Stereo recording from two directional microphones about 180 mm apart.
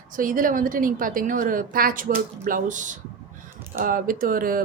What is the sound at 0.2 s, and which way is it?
Speech, 50° right (ahead or behind).